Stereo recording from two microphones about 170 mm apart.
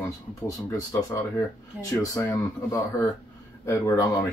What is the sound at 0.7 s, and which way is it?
Speech, 20° left (ahead or behind).